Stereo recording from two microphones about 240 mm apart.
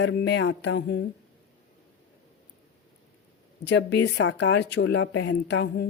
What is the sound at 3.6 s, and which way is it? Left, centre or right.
Speech, left.